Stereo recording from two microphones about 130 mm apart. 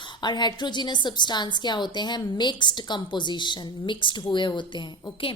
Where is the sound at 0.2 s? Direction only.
35° left (ahead or behind).